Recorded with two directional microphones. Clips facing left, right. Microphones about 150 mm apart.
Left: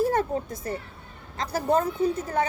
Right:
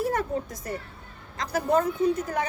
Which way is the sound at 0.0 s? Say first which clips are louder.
Left 3 dB; 30° left (ahead or behind).